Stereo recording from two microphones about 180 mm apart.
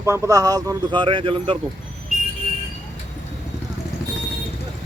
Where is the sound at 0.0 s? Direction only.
15° right (ahead or behind).